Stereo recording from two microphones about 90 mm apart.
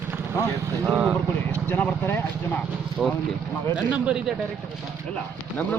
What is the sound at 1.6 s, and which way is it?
Speech, 20° left (ahead or behind).